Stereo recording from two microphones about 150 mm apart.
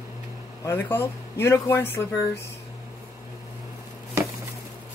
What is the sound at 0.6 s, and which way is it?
Speech, 15° left (ahead or behind).